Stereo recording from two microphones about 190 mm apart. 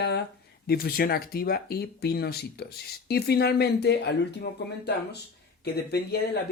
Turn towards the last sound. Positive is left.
turn(degrees=55)  # may be behind; listen again after turning